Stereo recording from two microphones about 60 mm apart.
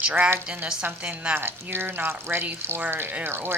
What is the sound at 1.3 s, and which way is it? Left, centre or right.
Speech, right.